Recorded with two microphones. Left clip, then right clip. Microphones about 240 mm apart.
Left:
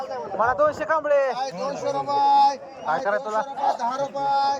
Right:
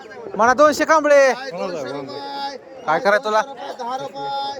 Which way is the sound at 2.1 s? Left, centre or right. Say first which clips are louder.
Left 11 dB; centre.